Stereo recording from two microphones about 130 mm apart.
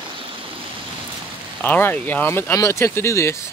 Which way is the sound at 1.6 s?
15° left (ahead or behind).